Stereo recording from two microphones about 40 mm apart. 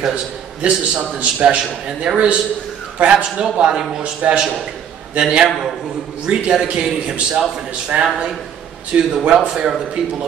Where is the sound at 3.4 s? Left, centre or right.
Centre.